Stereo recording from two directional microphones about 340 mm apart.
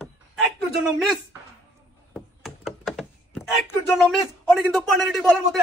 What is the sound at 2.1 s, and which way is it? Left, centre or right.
Knock, centre.